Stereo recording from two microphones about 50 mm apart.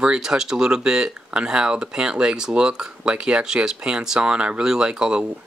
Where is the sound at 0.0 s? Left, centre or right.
Centre.